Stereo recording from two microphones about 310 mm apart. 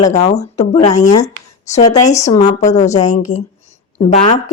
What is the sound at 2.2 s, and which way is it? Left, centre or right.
Speech, centre.